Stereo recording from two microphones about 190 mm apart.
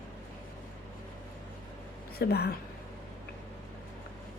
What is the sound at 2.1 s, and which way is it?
Speech, 55° left (ahead or behind).